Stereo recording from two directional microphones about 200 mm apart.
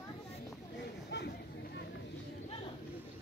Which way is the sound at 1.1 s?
55° left (ahead or behind).